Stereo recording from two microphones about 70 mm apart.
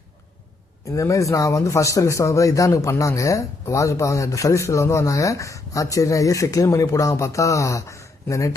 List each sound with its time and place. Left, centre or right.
0.9 s speech: left